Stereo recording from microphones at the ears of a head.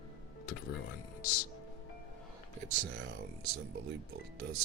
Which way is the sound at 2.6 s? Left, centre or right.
Right.